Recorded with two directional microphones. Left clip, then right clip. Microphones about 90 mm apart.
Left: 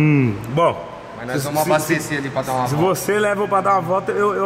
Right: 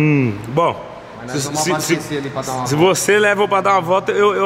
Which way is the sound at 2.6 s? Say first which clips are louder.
Right 4 dB; 35° right (ahead or behind).